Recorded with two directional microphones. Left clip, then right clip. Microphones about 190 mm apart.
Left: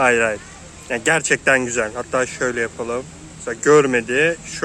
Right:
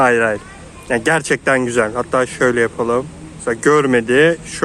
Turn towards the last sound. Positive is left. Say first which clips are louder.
# right 5 dB
turn(degrees=-25)  # may be behind; listen again after turning